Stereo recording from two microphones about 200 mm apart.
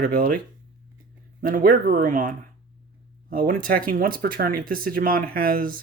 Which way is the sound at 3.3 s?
45° right (ahead or behind).